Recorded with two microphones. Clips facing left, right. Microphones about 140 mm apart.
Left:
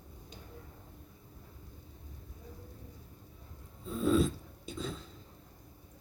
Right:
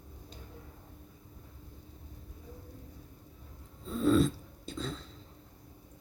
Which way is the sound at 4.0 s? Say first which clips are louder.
Right 2 dB; centre (ahead or behind).